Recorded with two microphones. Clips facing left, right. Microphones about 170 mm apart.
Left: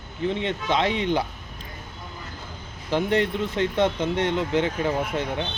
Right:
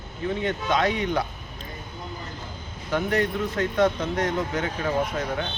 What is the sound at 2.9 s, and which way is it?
Speech, 25° left (ahead or behind).